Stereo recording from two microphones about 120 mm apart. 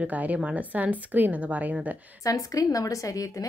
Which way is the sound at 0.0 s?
10° right (ahead or behind).